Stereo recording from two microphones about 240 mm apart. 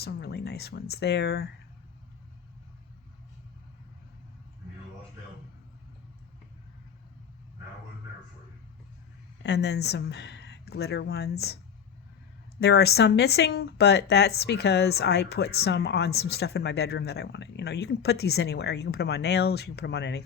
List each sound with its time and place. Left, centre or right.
0.0 s speech: left
9.4 s speech: left